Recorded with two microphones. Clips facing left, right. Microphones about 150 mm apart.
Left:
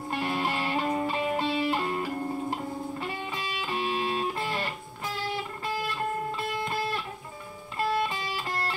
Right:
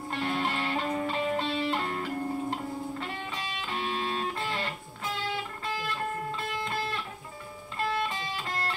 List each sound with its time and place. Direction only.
0.1 s music: 10° left (ahead or behind)